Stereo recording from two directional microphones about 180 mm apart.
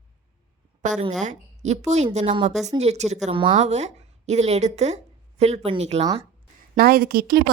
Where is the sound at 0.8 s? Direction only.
40° right (ahead or behind).